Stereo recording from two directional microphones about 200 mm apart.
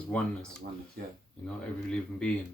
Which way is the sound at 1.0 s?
50° right (ahead or behind).